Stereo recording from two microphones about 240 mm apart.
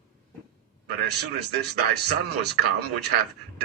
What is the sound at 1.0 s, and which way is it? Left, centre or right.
A man's voice, right.